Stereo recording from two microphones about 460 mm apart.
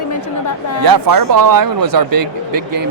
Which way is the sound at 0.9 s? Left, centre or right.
Right.